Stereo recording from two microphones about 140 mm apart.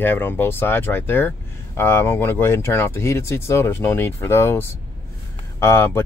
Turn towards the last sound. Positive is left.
turn(degrees=15)  # may be behind; listen again after turning